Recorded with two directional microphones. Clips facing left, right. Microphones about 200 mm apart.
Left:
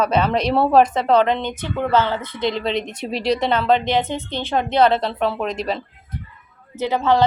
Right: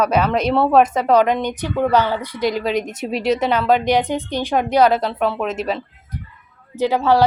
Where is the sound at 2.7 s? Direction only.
10° right (ahead or behind).